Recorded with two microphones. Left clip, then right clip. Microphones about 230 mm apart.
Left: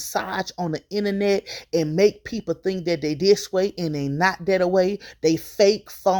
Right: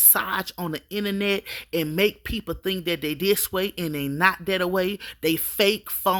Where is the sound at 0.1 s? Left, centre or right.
Centre.